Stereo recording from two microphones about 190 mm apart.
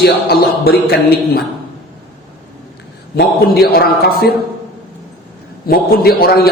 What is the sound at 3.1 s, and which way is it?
Speech, 55° left (ahead or behind).